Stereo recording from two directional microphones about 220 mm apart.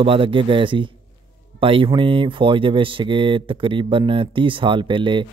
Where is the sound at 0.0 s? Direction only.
25° right (ahead or behind).